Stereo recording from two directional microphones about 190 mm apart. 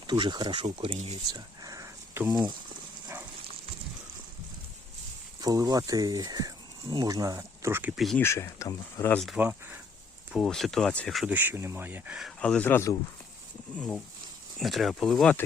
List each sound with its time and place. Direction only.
0.1 s speech: 25° right (ahead or behind)
1.3 s speech: 20° right (ahead or behind)
5.4 s speech: 20° right (ahead or behind); by 8.2 s centre (ahead or behind)
8.2 s speech: 15° left (ahead or behind); by 9.8 s 10° right (ahead or behind)
10.3 s speech: centre (ahead or behind)